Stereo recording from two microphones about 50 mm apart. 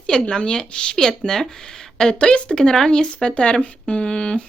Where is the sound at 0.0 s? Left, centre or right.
Centre.